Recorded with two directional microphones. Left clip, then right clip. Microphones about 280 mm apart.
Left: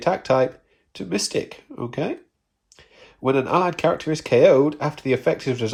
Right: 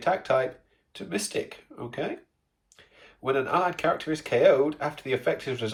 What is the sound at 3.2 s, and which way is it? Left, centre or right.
Speech, centre.